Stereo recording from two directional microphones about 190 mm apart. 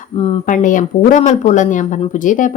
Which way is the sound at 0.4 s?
45° left (ahead or behind).